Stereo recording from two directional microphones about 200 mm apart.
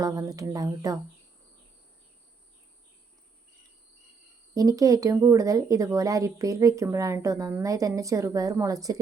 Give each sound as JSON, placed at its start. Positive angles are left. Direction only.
{"t": 0.0, "sound": "speech", "side_deg": -20}
{"t": 4.5, "sound": "speech", "side_deg": -20}